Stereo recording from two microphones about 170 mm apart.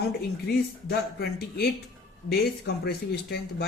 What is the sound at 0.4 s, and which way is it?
Speech, 70° left (ahead or behind).